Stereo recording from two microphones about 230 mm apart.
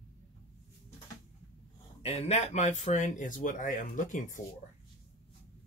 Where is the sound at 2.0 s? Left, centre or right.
Left.